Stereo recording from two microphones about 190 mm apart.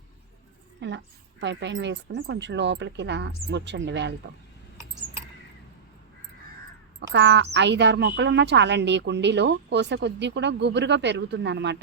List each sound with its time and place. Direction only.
0.8 s speech: 70° right (ahead or behind)
7.1 s a woman's voice: 65° right (ahead or behind)